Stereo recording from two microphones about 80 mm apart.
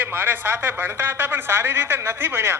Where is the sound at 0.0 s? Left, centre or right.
Right.